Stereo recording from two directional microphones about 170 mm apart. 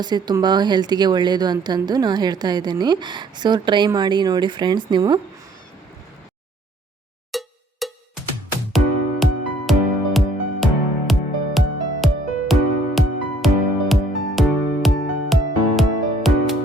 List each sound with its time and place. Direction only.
0.0 s speech: 25° right (ahead or behind)
7.3 s cowbell: centre (ahead or behind)
9.2 s music: centre (ahead or behind)